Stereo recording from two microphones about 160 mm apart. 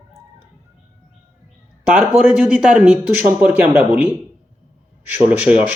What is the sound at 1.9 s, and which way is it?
Speech, 5° right (ahead or behind).